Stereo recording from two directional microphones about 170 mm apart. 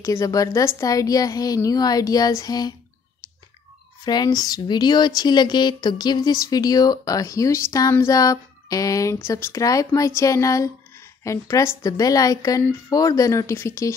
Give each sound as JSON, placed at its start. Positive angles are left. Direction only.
{"t": 0.0, "sound": "speech", "side_deg": 15}
{"t": 4.0, "sound": "speech", "side_deg": 25}